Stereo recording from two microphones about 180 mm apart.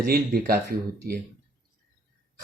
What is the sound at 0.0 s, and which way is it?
Speech, 55° right (ahead or behind).